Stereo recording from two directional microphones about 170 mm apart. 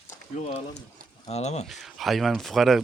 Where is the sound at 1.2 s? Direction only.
40° left (ahead or behind).